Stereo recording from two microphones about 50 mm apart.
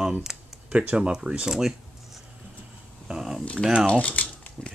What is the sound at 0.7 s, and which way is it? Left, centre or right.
Speech, right.